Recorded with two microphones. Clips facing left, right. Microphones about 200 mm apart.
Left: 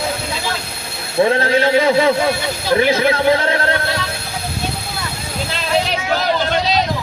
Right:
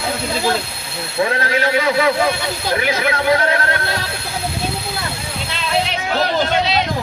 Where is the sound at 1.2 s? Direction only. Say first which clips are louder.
Left 4 dB; 30° left (ahead or behind).